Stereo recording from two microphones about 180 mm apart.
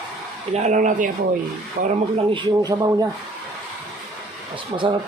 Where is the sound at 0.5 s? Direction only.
40° right (ahead or behind).